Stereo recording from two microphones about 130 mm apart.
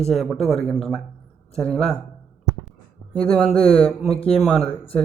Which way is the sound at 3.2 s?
5° left (ahead or behind).